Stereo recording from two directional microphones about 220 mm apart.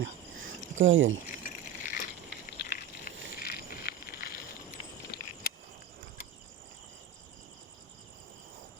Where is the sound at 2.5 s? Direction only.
45° left (ahead or behind).